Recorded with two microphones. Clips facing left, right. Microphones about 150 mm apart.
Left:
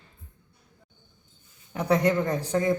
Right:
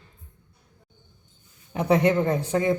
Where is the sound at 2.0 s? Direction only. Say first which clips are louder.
Right 3 dB; 25° right (ahead or behind).